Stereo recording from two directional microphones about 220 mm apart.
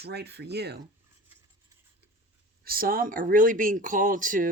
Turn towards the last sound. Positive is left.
turn(degrees=-35)  # may be behind; listen again after turning